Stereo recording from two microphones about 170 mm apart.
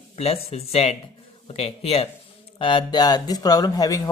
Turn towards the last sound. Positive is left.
turn(degrees=20)  # may be behind; listen again after turning